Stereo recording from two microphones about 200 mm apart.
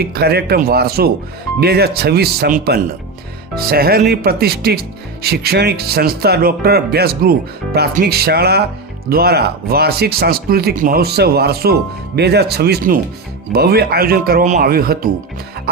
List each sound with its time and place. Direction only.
0.0 s speech: 50° right (ahead or behind)